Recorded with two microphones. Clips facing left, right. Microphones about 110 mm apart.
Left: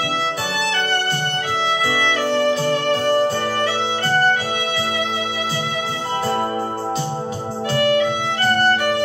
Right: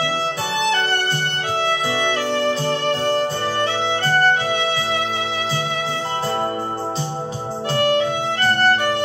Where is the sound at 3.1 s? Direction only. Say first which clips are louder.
Left 2 dB; 30° right (ahead or behind).